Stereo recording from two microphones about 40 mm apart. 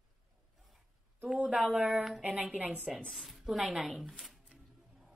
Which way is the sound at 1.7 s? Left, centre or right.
Right.